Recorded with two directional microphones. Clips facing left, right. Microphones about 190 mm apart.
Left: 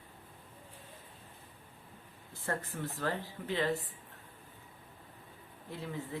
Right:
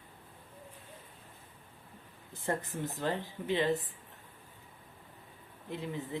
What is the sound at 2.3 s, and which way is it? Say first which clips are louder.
Speech: right 3 dB; 20° right (ahead or behind).